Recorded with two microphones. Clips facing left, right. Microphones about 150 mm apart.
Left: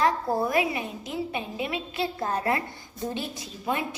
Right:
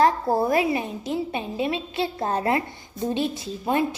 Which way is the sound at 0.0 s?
30° right (ahead or behind).